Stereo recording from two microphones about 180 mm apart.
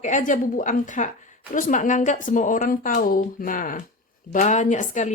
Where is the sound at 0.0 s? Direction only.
45° left (ahead or behind).